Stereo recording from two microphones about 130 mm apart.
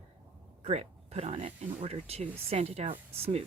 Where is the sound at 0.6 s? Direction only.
55° right (ahead or behind).